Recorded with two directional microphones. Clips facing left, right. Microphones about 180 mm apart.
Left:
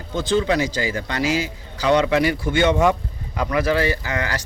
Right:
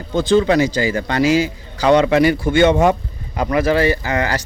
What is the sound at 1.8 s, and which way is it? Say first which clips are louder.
Speech: right 5 dB; 60° right (ahead or behind).